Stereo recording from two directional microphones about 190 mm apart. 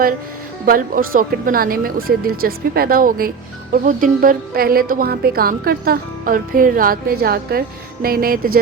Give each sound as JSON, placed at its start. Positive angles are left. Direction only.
{"t": 0.6, "sound": "speech", "side_deg": -50}